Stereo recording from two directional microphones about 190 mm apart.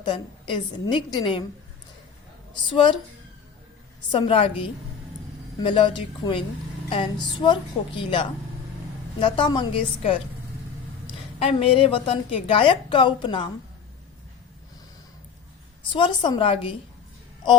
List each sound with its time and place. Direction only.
0.0 s a woman's voice: 25° left (ahead or behind)
2.6 s a woman's voice: 25° left (ahead or behind)
4.1 s a woman's voice: 25° left (ahead or behind)
5.5 s a woman's voice: 25° left (ahead or behind)
11.4 s a woman's voice: 30° left (ahead or behind)
15.9 s a woman's voice: 25° left (ahead or behind)